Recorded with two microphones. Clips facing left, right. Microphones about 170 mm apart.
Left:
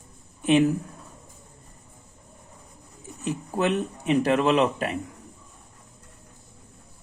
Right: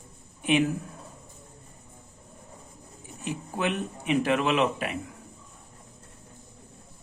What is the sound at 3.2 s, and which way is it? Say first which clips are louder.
Speech: left 4 dB; 40° left (ahead or behind).